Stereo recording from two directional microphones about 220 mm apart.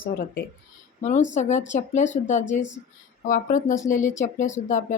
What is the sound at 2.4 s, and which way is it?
Speech, 55° left (ahead or behind).